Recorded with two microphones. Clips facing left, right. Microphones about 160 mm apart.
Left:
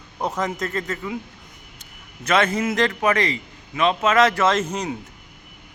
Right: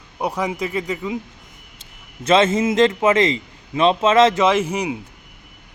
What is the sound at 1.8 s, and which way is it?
A man's voice, 25° right (ahead or behind).